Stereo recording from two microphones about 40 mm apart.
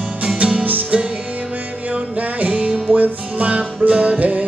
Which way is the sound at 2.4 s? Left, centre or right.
Right.